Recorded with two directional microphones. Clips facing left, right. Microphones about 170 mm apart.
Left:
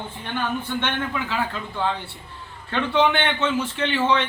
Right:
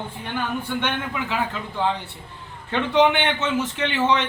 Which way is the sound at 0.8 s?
10° right (ahead or behind).